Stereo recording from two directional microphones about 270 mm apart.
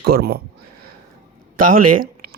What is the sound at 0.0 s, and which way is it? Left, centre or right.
Speech, right.